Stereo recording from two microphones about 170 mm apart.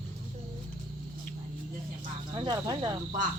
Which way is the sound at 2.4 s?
25° right (ahead or behind).